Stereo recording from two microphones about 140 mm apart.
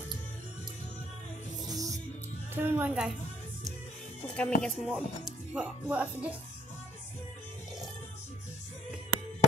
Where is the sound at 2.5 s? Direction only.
15° right (ahead or behind).